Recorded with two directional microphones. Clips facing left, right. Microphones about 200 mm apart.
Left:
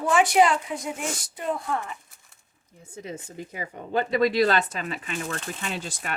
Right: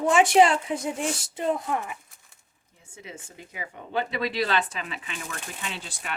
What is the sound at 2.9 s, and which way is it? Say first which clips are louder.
Speech: left 6 dB; 40° left (ahead or behind).